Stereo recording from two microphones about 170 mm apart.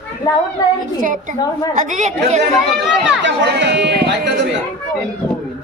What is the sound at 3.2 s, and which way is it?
Speech, 90° right.